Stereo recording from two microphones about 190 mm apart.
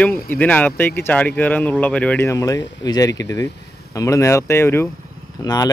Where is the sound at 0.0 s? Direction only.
10° left (ahead or behind).